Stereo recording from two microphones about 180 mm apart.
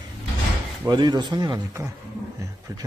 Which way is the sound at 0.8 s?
20° right (ahead or behind).